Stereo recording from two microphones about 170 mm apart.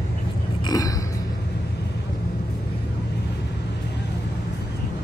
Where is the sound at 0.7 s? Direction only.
20° left (ahead or behind).